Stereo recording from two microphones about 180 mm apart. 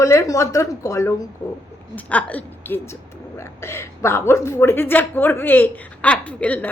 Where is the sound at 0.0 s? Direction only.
15° left (ahead or behind).